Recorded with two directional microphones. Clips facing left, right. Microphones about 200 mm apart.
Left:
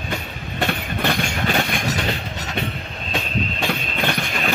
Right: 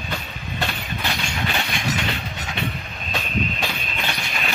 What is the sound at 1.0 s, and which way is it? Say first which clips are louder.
Train: left 5 dB; 50° left (ahead or behind).